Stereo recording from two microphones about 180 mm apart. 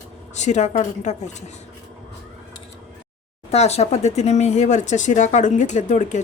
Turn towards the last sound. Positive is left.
turn(degrees=45)  # may be behind; listen again after turning